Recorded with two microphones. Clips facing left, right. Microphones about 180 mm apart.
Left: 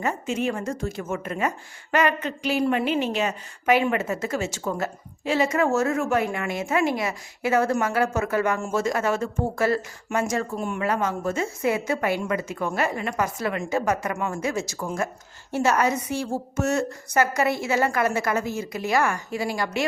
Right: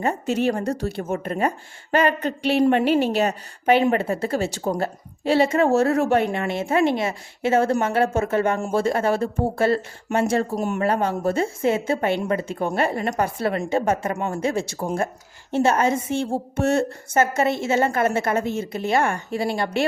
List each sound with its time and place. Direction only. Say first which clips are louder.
0.0 s a woman's voice: right 4 dB; 35° right (ahead or behind)